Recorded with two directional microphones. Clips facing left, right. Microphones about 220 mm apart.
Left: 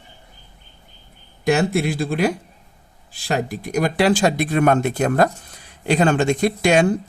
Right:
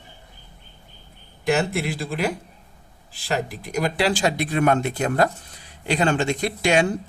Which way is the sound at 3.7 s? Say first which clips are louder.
Left 4 dB; 50° left (ahead or behind).